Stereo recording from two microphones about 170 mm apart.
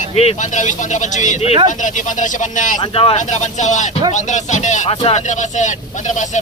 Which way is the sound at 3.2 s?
45° left (ahead or behind).